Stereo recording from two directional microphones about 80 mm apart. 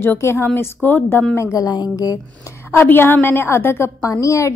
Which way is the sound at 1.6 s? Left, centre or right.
Left.